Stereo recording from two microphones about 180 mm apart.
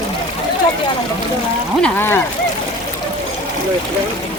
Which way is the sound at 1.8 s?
10° left (ahead or behind).